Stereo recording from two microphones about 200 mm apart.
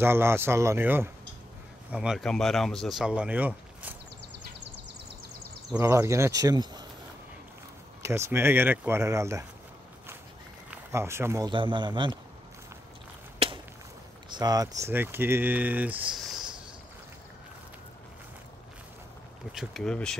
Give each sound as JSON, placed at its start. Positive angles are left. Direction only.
{"t": 0.0, "sound": "speech", "side_deg": -10}
{"t": 5.7, "sound": "speech", "side_deg": -15}
{"t": 8.0, "sound": "speech", "side_deg": -10}
{"t": 10.7, "sound": "speech", "side_deg": -15}
{"t": 14.3, "sound": "speech", "side_deg": -20}
{"t": 19.5, "sound": "speech", "side_deg": 0}